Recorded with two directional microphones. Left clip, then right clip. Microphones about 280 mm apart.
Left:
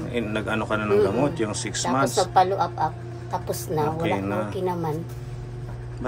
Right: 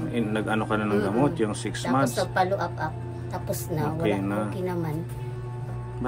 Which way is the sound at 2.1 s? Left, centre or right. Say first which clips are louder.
Left 5 dB; centre.